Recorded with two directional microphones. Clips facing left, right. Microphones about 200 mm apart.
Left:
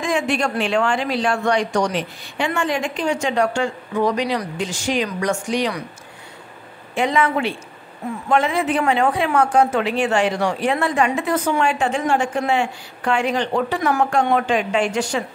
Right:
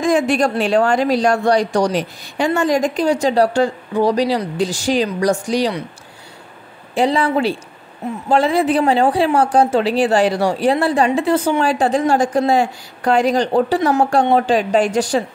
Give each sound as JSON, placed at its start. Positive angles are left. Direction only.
{"t": 0.0, "sound": "a woman's voice", "side_deg": -40}
{"t": 7.0, "sound": "a woman's voice", "side_deg": -35}